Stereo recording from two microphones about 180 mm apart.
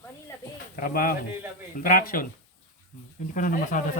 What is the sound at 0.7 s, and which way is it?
Speech, 55° left (ahead or behind).